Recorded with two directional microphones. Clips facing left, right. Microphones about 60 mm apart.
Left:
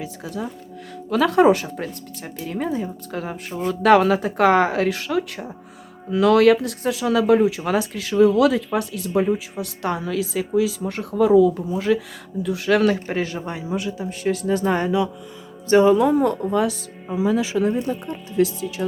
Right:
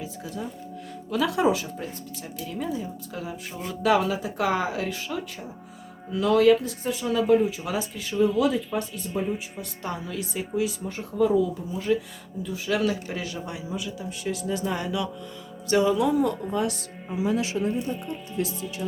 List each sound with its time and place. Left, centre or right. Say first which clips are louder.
0.0 s speech: left 5 dB; left
1.1 s speech: left 7 dB; left
14.8 s speech: left 8 dB; left
15.7 s speech: left 7 dB; left
17.6 s speech: left 6 dB; left